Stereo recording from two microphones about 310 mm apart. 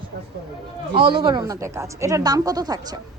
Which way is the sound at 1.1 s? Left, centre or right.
Centre.